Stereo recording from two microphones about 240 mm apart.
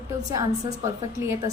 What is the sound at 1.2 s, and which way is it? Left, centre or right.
Speech, centre.